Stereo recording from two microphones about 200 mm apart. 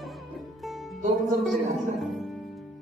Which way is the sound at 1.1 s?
Centre (ahead or behind).